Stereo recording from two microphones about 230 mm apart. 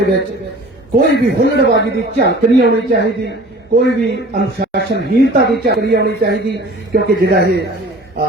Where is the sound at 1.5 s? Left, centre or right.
Right.